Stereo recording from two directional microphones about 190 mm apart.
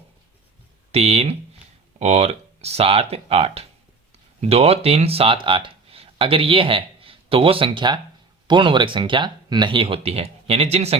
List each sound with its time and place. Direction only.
0.9 s speech: 30° right (ahead or behind)